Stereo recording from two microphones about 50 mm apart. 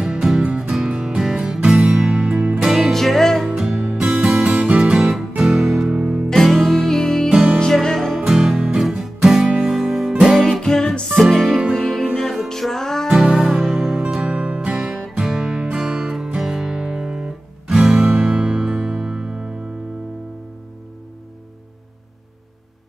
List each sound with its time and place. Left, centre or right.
0.0 s music: centre; by 2.6 s right
2.9 s music: centre
3.6 s music: centre
6.3 s music: centre
8.3 s music: centre
10.6 s music: centre
13.1 s music: centre
13.6 s music: centre
14.2 s music: centre
18.6 s music: centre